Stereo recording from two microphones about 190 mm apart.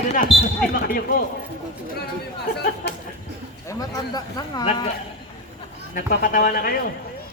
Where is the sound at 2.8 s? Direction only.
60° left (ahead or behind).